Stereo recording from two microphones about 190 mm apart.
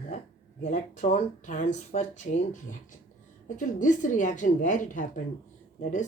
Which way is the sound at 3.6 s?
40° left (ahead or behind).